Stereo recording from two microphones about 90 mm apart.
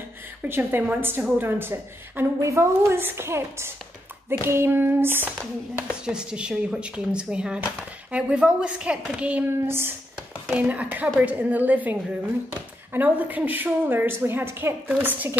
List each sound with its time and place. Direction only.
0.4 s a woman's voice: 25° right (ahead or behind)
6.0 s speech: 10° right (ahead or behind)
9.7 s a woman's voice: 25° right (ahead or behind)
10.5 s a woman's voice: 15° right (ahead or behind)